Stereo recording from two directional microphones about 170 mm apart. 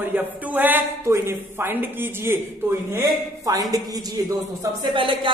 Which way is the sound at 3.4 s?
20° right (ahead or behind).